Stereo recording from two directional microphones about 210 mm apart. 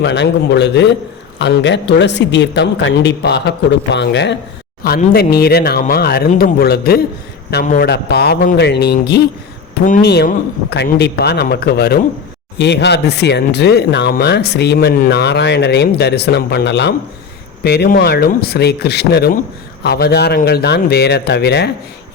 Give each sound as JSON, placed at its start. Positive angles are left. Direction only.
{"t": 0.0, "sound": "speech", "side_deg": 55}